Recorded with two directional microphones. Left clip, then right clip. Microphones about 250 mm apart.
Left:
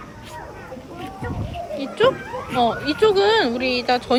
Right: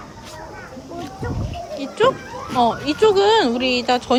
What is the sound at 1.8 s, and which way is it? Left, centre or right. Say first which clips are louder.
Speech: right 1 dB; centre.